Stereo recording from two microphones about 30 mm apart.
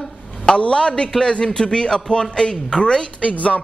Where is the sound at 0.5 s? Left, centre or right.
Left.